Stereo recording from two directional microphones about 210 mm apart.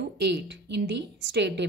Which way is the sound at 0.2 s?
55° right (ahead or behind).